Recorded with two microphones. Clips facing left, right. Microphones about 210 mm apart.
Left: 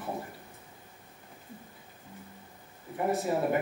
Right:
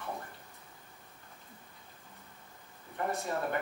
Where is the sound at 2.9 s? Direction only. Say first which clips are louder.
Left 6 dB; 5° left (ahead or behind).